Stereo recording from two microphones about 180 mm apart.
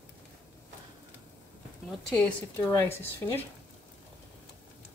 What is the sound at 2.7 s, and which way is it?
Speech, 20° left (ahead or behind).